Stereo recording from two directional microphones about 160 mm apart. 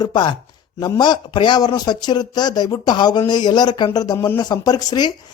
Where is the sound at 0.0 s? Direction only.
25° left (ahead or behind).